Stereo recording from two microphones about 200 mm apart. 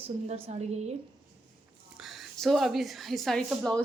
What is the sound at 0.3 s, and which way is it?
Speech, 30° right (ahead or behind).